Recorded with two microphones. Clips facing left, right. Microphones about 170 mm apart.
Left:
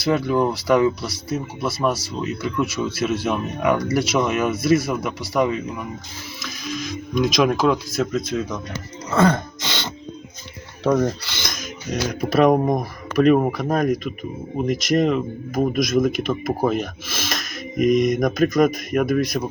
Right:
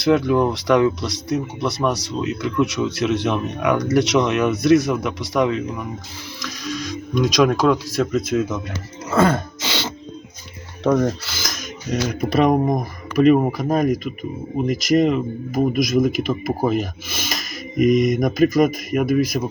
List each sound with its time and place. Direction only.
0.0 s speech: centre (ahead or behind)
9.0 s throat clearing: 5° right (ahead or behind)
10.8 s speech: centre (ahead or behind)